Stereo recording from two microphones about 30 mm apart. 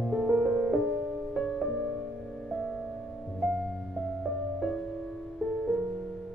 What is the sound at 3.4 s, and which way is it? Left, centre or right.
Music, centre.